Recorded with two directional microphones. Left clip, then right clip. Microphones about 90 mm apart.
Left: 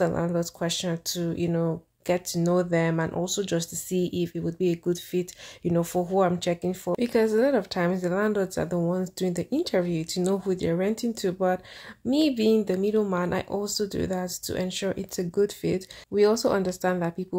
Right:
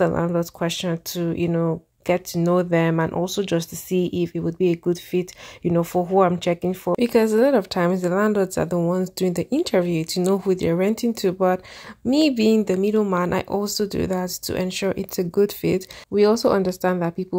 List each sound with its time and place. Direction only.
0.0 s speech: 40° right (ahead or behind)